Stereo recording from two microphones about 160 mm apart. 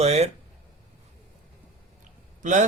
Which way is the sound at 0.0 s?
40° right (ahead or behind).